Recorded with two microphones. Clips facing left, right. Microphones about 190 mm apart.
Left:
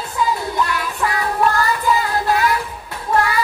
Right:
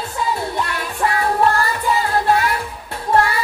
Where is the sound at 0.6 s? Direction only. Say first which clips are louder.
Left 1 dB; 30° right (ahead or behind).